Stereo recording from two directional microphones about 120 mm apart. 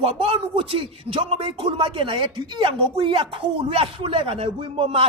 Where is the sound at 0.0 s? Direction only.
55° right (ahead or behind).